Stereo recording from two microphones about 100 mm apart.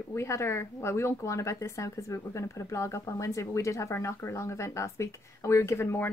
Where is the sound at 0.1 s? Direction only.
25° left (ahead or behind).